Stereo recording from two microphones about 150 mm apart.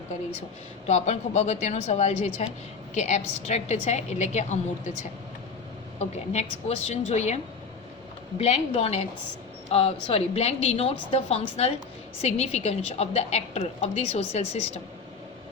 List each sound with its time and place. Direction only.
0.9 s a woman's voice: 50° left (ahead or behind)
6.0 s a woman's voice: 45° left (ahead or behind)
8.4 s a woman's voice: 45° left (ahead or behind)